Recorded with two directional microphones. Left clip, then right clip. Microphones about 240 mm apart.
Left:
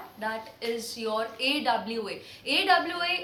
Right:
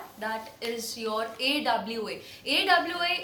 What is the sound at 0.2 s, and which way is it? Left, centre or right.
A woman's voice, centre.